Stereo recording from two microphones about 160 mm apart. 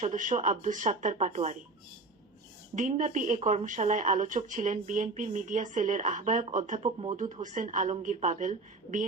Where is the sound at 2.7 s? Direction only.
50° right (ahead or behind).